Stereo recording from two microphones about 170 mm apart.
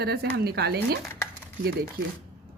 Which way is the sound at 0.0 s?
70° right (ahead or behind).